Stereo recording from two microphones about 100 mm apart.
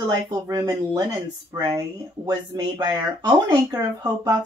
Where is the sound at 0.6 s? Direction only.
30° right (ahead or behind).